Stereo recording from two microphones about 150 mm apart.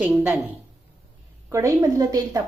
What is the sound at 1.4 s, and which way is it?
Speech, 20° right (ahead or behind).